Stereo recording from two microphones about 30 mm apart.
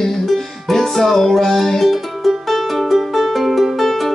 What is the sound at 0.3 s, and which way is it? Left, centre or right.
Music, centre.